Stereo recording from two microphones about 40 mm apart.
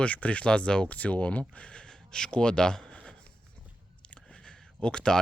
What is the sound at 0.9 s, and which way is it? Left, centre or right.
Speech, left.